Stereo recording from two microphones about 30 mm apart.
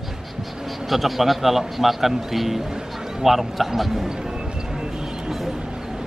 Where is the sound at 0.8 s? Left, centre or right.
Centre.